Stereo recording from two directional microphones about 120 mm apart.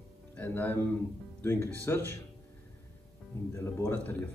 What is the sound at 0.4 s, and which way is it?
Speech, 15° left (ahead or behind).